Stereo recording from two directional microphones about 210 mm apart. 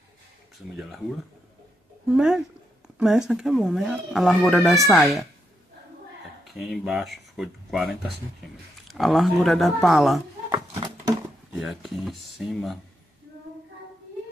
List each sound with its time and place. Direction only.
0.6 s speech: centre (ahead or behind)
2.1 s speech: 5° right (ahead or behind)
6.5 s speech: centre (ahead or behind)
10.7 s a sound: 20° right (ahead or behind)
11.5 s speech: centre (ahead or behind)